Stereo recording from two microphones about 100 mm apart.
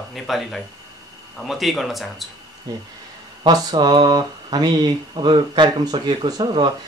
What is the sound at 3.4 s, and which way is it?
Speech, 45° right (ahead or behind).